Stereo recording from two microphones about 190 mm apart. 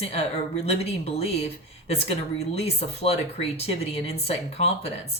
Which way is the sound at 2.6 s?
30° left (ahead or behind).